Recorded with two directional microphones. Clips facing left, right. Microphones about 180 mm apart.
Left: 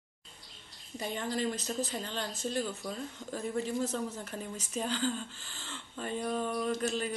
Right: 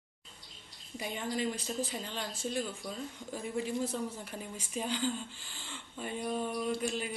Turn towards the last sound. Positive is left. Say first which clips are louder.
# left 2 dB
turn(degrees=-10)  # may be behind; listen again after turning